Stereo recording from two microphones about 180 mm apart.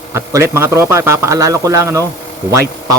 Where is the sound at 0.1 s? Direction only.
15° right (ahead or behind).